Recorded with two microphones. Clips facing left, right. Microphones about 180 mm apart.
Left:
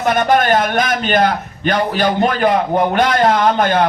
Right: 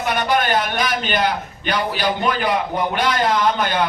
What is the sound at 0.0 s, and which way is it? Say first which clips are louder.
A man's voice: left 6 dB; 45° left (ahead or behind).